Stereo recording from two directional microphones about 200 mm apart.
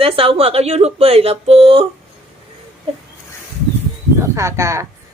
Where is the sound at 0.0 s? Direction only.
30° right (ahead or behind).